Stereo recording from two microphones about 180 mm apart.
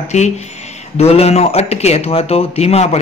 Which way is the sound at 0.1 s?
40° left (ahead or behind).